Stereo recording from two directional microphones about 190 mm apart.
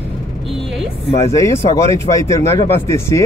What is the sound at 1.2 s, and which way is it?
Speech, 15° left (ahead or behind).